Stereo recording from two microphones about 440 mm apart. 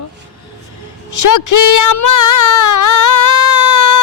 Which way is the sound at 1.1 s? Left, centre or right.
Left.